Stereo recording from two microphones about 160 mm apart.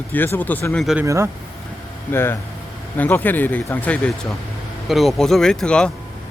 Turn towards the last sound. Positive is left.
turn(degrees=5)  # may be behind; listen again after turning